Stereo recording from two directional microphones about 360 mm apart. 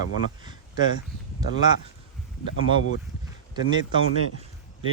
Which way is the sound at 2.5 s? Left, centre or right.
Left.